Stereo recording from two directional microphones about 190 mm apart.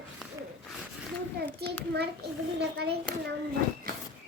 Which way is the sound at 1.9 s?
60° right (ahead or behind).